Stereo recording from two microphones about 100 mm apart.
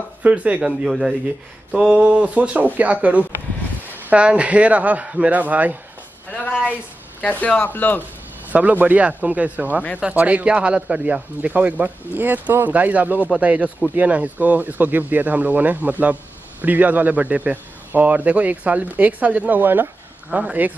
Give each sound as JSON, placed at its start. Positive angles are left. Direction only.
{"t": 0.2, "sound": "speech", "side_deg": -15}
{"t": 7.2, "sound": "speech", "side_deg": 15}
{"t": 8.5, "sound": "speech", "side_deg": -15}